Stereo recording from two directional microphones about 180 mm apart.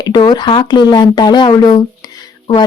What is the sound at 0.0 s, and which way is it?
Speech, 25° left (ahead or behind).